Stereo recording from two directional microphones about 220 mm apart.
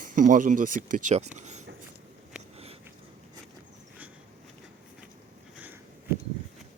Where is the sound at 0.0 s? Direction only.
40° right (ahead or behind).